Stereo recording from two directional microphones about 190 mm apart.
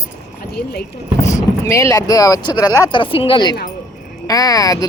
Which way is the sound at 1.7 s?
15° left (ahead or behind).